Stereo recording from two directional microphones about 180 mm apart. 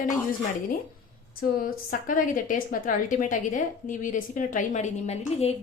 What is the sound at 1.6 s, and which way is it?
A woman's voice, 50° left (ahead or behind).